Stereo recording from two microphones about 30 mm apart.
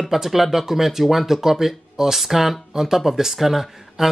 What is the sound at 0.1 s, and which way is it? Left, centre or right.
Speech, centre.